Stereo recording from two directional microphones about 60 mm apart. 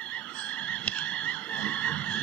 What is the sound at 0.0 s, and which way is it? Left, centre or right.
Frog, left.